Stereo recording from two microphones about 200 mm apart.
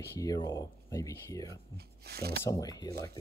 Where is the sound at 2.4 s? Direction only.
15° left (ahead or behind).